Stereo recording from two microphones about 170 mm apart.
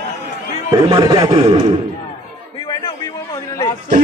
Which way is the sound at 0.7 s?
25° right (ahead or behind).